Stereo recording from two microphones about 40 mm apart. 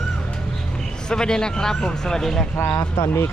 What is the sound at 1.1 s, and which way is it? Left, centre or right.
Speech, centre.